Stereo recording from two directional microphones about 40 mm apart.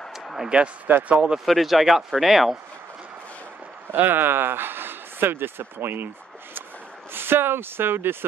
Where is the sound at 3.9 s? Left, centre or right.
Right.